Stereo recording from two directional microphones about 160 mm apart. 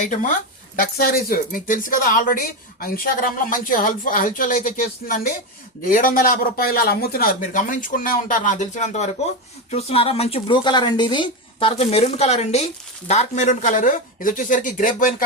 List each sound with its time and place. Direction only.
0.0 s speech: 50° left (ahead or behind)
0.8 s speech: 70° left (ahead or behind)